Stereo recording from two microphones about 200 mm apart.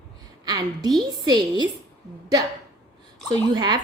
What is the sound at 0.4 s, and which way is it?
Speech, 20° right (ahead or behind).